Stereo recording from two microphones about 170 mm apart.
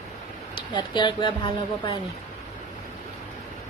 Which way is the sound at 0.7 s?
25° left (ahead or behind).